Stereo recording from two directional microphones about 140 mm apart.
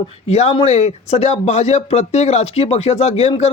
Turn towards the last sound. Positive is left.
turn(degrees=50)  # may be behind; listen again after turning